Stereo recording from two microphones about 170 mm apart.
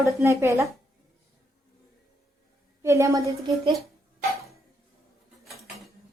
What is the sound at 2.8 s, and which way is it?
Speech, 15° right (ahead or behind).